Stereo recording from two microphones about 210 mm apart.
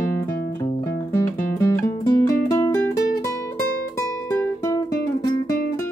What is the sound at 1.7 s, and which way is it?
Music, 15° left (ahead or behind).